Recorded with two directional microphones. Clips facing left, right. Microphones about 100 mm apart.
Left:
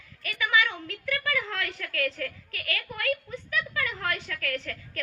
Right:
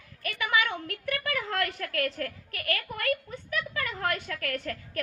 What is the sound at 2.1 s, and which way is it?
Speech, 35° right (ahead or behind).